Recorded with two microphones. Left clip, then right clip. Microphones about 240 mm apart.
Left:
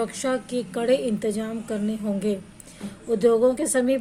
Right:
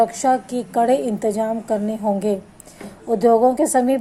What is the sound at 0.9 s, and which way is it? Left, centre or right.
Speech, right.